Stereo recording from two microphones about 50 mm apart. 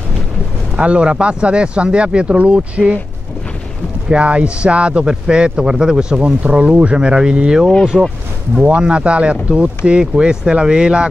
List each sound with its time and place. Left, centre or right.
0.7 s speech: right
4.1 s speech: right
7.9 s speech: centre
8.6 s speech: right